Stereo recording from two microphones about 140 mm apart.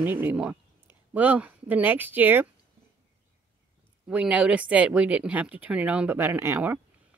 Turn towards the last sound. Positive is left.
turn(degrees=-15)  # may be behind; listen again after turning